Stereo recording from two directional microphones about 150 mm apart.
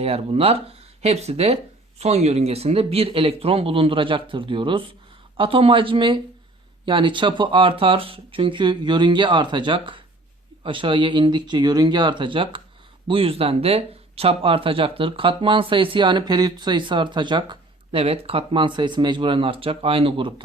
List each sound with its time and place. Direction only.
0.0 s speech: 40° right (ahead or behind)